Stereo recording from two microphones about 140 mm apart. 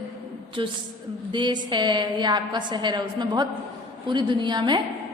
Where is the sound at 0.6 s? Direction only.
35° right (ahead or behind).